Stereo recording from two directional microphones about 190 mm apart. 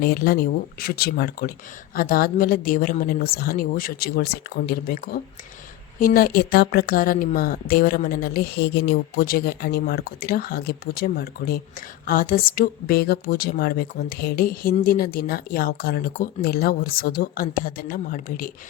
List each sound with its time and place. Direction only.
0.0 s speech: 50° left (ahead or behind)